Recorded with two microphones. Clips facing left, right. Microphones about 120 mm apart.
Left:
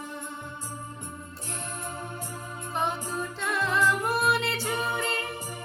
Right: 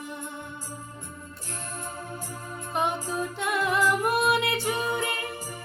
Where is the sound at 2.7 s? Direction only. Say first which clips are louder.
Right 2 dB; 15° right (ahead or behind).